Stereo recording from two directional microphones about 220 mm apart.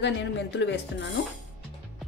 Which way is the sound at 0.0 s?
50° left (ahead or behind).